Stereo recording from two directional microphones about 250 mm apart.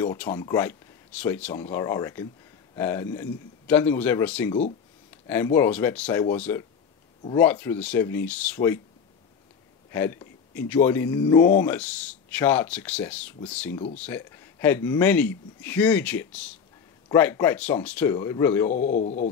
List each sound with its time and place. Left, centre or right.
0.0 s speech: centre
9.8 s speech: centre
18.7 s a man's voice: left